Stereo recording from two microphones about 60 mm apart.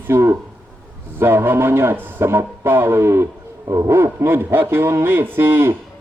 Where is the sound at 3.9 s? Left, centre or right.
Right.